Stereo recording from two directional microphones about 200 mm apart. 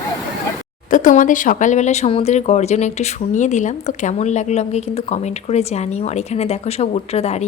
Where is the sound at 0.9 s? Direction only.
40° left (ahead or behind).